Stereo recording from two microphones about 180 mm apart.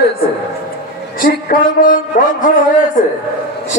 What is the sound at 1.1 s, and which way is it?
A man's voice, 50° left (ahead or behind).